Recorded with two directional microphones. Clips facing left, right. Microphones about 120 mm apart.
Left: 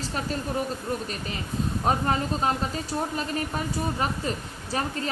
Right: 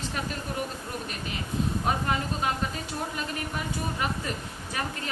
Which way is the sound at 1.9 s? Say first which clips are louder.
Left 6 dB; 35° left (ahead or behind).